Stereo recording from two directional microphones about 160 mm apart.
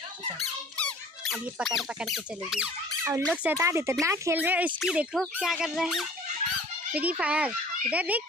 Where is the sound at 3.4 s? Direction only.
15° right (ahead or behind).